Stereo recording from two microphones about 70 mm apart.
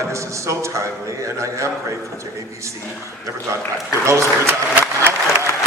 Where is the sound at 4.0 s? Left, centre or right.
Right.